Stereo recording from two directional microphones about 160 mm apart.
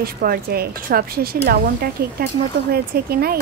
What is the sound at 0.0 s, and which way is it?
Speech, 70° right (ahead or behind).